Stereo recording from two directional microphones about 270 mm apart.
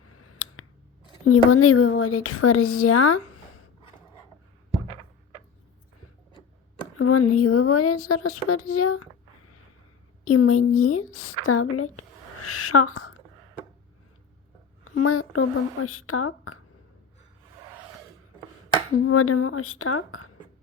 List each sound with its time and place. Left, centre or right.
0.0 s a sound: left
1.2 s speech: left
7.0 s speech: left
10.2 s speech: left
14.8 s speech: left
19.0 s speech: left